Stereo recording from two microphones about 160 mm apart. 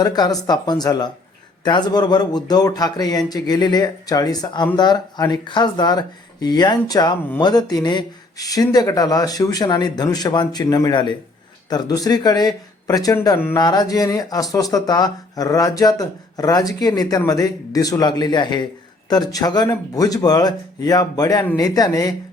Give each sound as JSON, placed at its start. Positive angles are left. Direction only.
{"t": 0.0, "sound": "speech", "side_deg": 25}